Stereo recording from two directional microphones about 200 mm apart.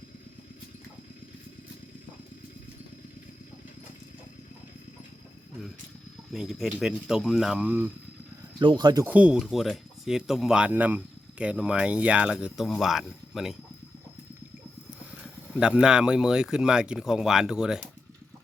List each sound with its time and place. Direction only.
6.3 s speech: centre (ahead or behind)
8.5 s speech: 20° right (ahead or behind)
9.0 s speech: 5° right (ahead or behind)
15.1 s speech: 5° right (ahead or behind)